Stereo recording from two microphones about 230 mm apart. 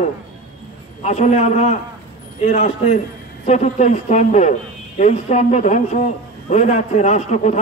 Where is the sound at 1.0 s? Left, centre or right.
Left.